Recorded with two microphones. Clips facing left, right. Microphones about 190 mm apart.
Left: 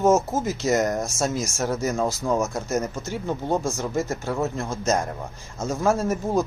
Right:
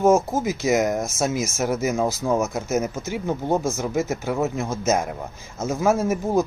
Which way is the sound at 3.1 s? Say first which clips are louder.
Right 2 dB; 15° right (ahead or behind).